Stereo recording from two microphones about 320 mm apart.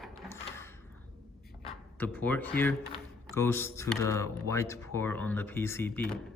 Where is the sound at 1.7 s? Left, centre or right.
Centre.